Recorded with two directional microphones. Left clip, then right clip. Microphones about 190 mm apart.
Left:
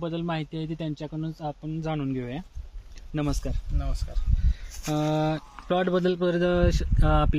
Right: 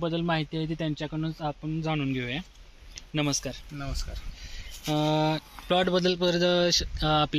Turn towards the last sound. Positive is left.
turn(degrees=45)  # may be behind; listen again after turning